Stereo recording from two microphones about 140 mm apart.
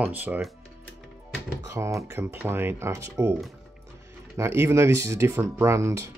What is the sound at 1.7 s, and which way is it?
Speech, 20° right (ahead or behind).